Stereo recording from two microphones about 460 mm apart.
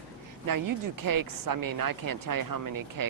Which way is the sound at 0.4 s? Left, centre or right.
Right.